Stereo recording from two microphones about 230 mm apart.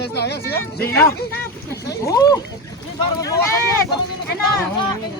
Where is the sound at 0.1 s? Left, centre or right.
Left.